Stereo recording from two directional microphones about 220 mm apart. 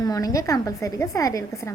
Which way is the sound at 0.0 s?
15° left (ahead or behind).